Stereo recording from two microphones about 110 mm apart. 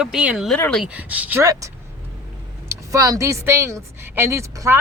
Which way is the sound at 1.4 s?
30° right (ahead or behind).